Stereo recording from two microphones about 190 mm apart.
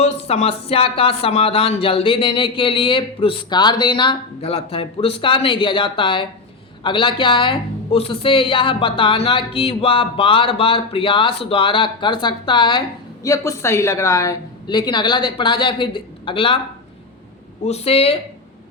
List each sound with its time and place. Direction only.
0.0 s speech: 35° left (ahead or behind)
17.7 s speech: 35° left (ahead or behind)